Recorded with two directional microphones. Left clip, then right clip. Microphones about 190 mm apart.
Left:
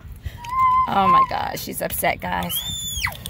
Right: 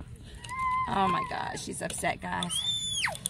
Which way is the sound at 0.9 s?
35° left (ahead or behind).